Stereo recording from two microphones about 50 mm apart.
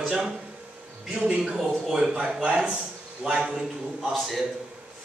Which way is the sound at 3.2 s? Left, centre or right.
Centre.